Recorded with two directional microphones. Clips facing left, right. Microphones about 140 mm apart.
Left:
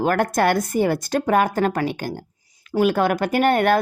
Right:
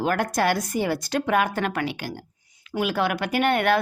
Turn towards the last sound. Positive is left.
turn(degrees=45)  # may be behind; listen again after turning